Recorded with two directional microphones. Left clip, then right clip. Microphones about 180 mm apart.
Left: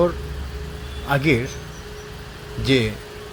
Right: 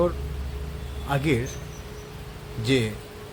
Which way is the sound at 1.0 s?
15° left (ahead or behind).